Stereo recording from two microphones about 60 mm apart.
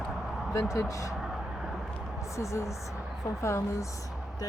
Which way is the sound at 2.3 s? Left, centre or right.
Left.